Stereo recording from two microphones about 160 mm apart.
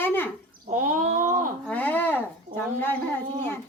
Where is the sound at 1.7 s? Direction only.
10° left (ahead or behind).